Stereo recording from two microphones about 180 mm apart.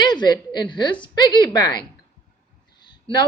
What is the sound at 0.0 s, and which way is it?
A woman's voice, 25° left (ahead or behind).